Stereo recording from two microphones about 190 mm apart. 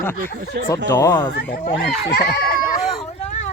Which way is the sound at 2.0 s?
55° left (ahead or behind).